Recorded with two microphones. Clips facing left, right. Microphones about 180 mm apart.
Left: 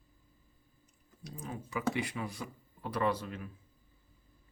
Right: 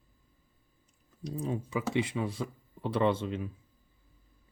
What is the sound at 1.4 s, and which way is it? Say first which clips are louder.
Speech: right 2 dB; 25° right (ahead or behind).